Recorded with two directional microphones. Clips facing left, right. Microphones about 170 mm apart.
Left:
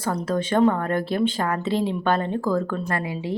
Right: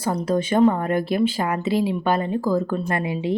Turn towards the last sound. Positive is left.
turn(degrees=-20)  # may be behind; listen again after turning